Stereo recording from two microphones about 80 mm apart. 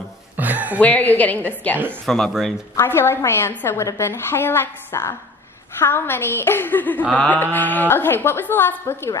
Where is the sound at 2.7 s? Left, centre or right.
Left.